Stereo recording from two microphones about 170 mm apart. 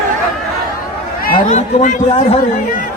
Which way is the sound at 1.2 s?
60° left (ahead or behind).